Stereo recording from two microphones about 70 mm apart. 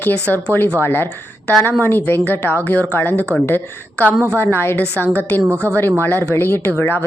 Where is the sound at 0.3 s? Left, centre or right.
Right.